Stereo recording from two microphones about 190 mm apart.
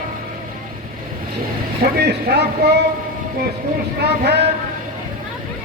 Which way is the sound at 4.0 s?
60° right (ahead or behind).